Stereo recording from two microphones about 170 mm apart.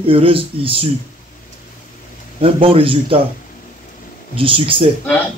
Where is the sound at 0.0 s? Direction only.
35° right (ahead or behind).